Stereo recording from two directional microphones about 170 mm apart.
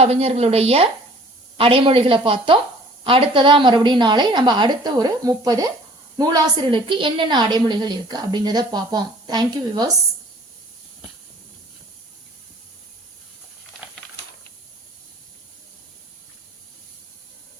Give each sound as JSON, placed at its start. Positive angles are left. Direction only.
{"t": 0.0, "sound": "a woman's voice", "side_deg": -35}